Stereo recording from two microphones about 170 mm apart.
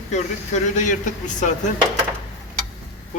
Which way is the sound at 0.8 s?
45° left (ahead or behind).